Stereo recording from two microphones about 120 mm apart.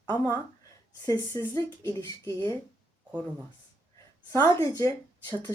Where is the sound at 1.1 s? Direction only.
30° left (ahead or behind).